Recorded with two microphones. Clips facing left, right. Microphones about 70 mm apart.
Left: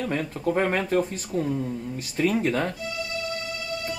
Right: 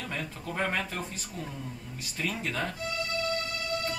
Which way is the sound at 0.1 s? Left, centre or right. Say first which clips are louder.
Left 11 dB; left.